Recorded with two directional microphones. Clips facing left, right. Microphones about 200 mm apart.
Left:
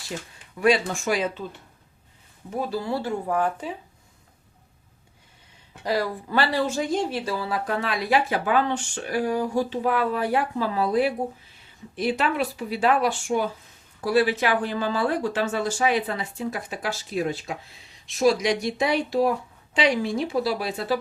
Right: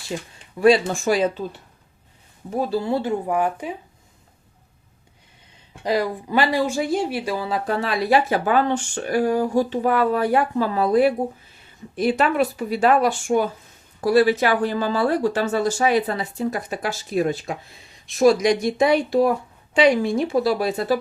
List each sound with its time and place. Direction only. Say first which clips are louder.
0.1 s speech: right 4 dB; 20° right (ahead or behind)
0.6 s speech: right 5 dB; 30° right (ahead or behind)
2.6 s speech: right 5 dB; 30° right (ahead or behind)
5.8 s speech: right 3 dB; 20° right (ahead or behind)
7.7 s speech: right 4 dB; 35° right (ahead or behind)